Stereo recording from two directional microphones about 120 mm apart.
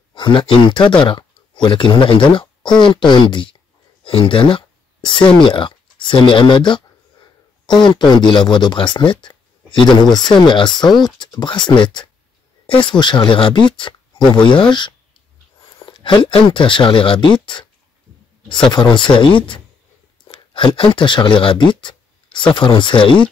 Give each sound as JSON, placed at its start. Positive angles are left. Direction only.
{"t": 0.1, "sound": "speech", "side_deg": 40}